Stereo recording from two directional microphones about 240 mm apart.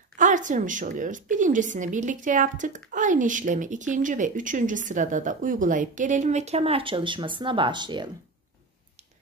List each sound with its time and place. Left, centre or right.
0.2 s speech: right